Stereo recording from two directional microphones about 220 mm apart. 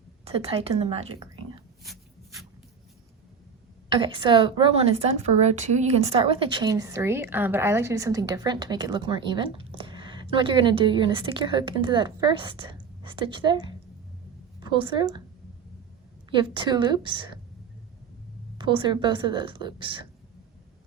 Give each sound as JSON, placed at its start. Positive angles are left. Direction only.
{"t": 0.3, "sound": "a woman's voice", "side_deg": -25}
{"t": 1.8, "sound": "rub", "side_deg": 0}
{"t": 3.9, "sound": "a woman's voice", "side_deg": -20}
{"t": 14.6, "sound": "a woman's voice", "side_deg": -20}
{"t": 16.3, "sound": "a woman's voice", "side_deg": -20}
{"t": 18.5, "sound": "a woman's voice", "side_deg": -20}